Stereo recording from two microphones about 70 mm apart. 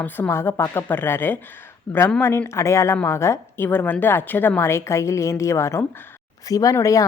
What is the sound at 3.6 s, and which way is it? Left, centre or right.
Speech, left.